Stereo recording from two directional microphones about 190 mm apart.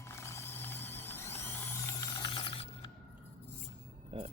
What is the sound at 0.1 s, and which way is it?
Mechanisms, 15° left (ahead or behind).